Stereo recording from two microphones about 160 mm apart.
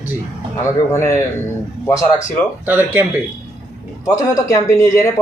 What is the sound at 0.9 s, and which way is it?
Speech, 15° left (ahead or behind).